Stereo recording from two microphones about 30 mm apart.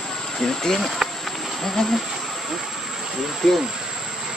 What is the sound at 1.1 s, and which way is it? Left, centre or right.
Insect, centre.